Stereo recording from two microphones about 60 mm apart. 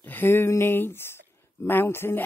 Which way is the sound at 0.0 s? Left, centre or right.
Left.